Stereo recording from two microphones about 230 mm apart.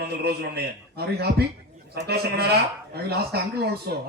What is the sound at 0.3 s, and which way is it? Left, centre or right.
A man's voice, right.